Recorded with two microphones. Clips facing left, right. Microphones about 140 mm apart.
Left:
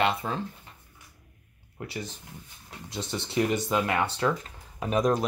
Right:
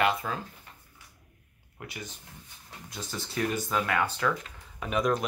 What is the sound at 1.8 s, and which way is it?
Speech, 30° left (ahead or behind).